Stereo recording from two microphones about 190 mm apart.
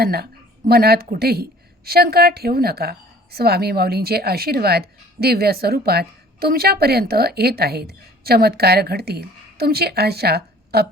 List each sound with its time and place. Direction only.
0.0 s a woman's voice: 55° right (ahead or behind)